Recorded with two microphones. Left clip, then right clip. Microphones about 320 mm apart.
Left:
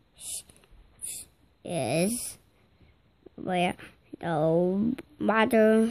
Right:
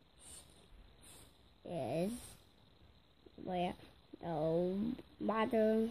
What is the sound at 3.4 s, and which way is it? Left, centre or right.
Speech, left.